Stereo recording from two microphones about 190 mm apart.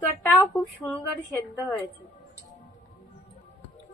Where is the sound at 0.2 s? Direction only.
10° left (ahead or behind).